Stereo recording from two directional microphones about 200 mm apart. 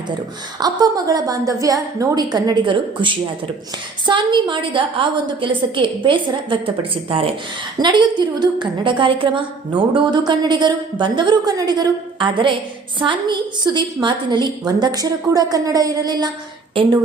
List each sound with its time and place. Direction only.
0.6 s a woman's voice: 20° right (ahead or behind)